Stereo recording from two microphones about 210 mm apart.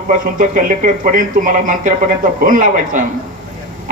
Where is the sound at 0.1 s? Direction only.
40° right (ahead or behind).